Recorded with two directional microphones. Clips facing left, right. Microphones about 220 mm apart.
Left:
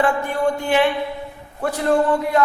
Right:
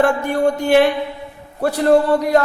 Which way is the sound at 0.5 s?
40° right (ahead or behind).